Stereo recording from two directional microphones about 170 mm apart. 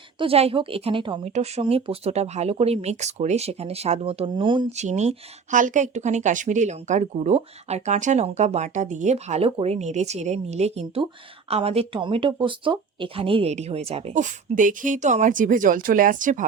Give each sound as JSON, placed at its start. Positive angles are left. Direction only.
{"t": 0.2, "sound": "speech", "side_deg": -35}
{"t": 4.7, "sound": "speech", "side_deg": -40}